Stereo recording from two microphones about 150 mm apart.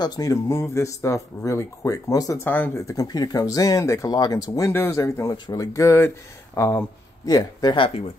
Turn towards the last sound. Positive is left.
turn(degrees=35)  # may be behind; listen again after turning